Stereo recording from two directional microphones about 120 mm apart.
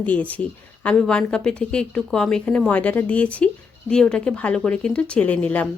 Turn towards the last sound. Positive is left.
turn(degrees=10)  # may be behind; listen again after turning